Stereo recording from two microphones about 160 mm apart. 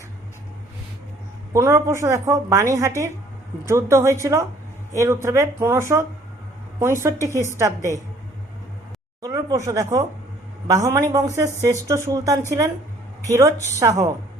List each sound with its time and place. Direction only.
1.5 s a woman's voice: 20° right (ahead or behind)
9.2 s a woman's voice: 20° right (ahead or behind)